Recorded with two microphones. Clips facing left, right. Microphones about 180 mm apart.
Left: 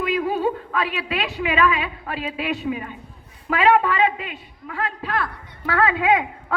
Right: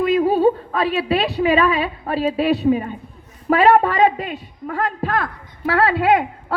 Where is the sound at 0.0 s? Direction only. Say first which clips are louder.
Right 7 dB; 35° right (ahead or behind).